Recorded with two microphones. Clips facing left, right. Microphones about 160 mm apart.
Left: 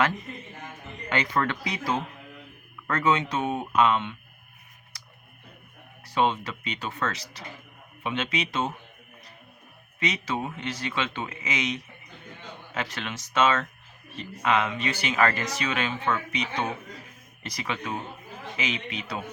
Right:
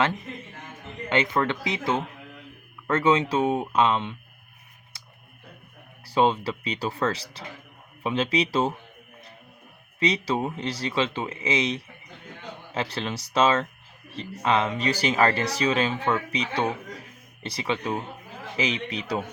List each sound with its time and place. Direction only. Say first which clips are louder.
1.1 s speech: right 3 dB; 20° right (ahead or behind)
6.1 s speech: right 3 dB; 30° right (ahead or behind)
10.0 s speech: right 5 dB; 30° right (ahead or behind)